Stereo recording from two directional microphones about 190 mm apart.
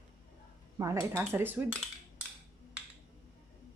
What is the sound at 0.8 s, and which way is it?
Speech, 15° right (ahead or behind).